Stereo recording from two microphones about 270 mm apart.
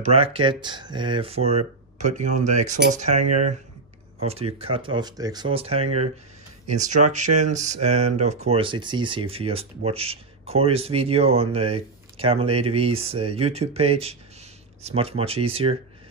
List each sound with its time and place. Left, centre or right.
0.0 s speech: right